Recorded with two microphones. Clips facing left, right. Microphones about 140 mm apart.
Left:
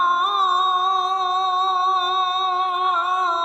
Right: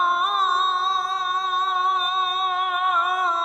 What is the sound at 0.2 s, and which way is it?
Music, 35° left (ahead or behind).